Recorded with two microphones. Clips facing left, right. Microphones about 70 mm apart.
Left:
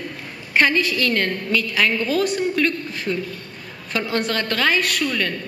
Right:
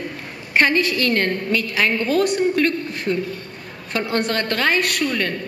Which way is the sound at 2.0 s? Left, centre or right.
Right.